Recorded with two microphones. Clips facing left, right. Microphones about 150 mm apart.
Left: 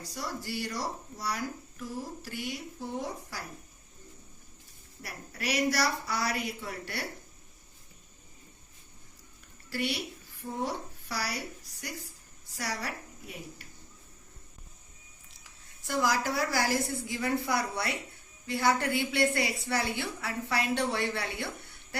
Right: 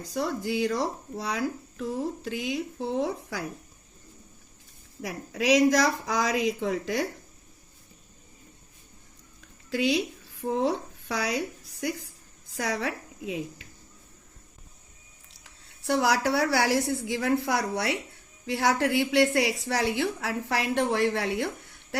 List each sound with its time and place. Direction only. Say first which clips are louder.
0.1 s speech: right 9 dB; 90° right
5.0 s speech: right 11 dB; 90° right
9.7 s a woman's voice: right 8 dB; 90° right
15.4 s speech: right 10 dB; 85° right
17.1 s a woman's voice: right 3 dB; 65° right (ahead or behind)